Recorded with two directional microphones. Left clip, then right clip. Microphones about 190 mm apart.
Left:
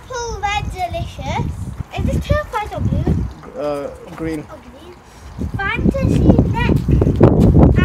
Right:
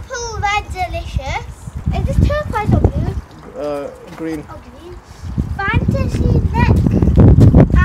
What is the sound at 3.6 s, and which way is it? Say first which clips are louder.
Bird: even; 10° left (ahead or behind).